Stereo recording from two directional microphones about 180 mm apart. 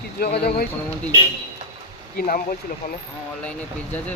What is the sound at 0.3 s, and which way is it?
Speech, 60° left (ahead or behind).